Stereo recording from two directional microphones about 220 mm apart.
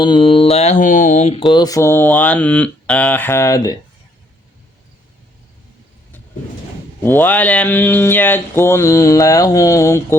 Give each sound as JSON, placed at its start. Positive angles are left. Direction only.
{"t": 0.0, "sound": "mantra", "side_deg": 20}
{"t": 7.0, "sound": "mantra", "side_deg": 10}